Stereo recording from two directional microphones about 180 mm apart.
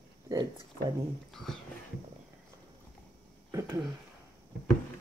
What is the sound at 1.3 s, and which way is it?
Whispering, centre (ahead or behind).